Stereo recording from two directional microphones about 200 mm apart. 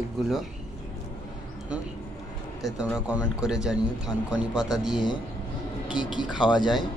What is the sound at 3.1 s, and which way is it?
A man's voice, 5° right (ahead or behind).